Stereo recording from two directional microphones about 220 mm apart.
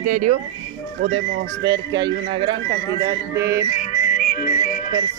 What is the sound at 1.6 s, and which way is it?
A man's voice, 15° right (ahead or behind).